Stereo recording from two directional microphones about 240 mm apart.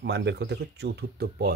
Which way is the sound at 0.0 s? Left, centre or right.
Right.